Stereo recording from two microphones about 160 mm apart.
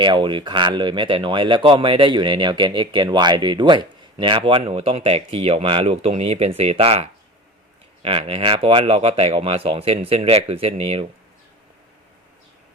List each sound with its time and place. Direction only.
0.0 s speech: 30° right (ahead or behind)